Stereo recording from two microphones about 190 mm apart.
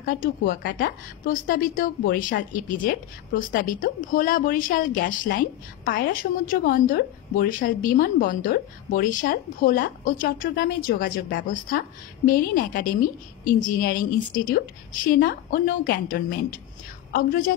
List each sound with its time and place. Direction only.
0.0 s a woman's voice: 45° left (ahead or behind)
12.3 s a woman's voice: 45° left (ahead or behind)